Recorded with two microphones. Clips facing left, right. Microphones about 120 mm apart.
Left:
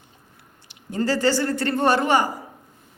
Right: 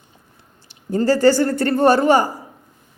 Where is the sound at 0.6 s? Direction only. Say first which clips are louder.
Right 6 dB; 40° right (ahead or behind).